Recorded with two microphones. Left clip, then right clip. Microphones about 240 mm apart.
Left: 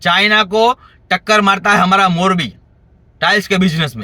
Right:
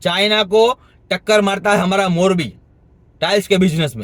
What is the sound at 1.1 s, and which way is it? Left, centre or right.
A man's voice, centre.